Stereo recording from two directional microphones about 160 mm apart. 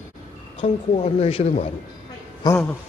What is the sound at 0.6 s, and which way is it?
Speech, 40° left (ahead or behind).